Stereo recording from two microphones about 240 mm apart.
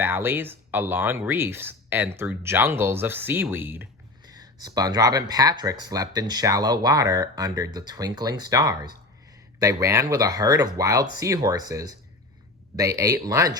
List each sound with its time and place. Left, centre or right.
0.0 s speech: centre